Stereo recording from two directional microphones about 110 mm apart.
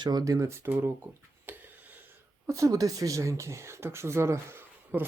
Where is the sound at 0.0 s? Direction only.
35° right (ahead or behind); by 0.9 s 20° right (ahead or behind).